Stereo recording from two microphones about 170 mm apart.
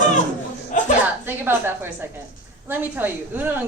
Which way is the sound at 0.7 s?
50° left (ahead or behind).